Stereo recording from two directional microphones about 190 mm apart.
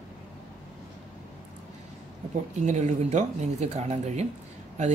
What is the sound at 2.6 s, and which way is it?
Speech, 40° right (ahead or behind).